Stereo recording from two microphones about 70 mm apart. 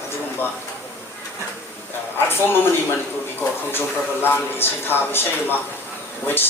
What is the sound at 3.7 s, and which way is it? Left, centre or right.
A man's voice, left.